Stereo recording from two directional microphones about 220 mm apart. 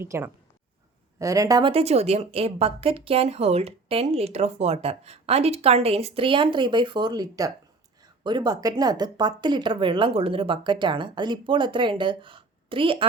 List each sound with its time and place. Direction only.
0.0 s a woman's voice: 10° right (ahead or behind)